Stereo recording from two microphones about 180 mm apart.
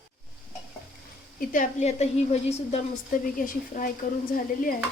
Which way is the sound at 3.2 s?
50° left (ahead or behind).